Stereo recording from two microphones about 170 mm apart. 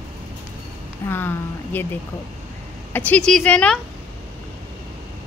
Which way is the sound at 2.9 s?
10° left (ahead or behind).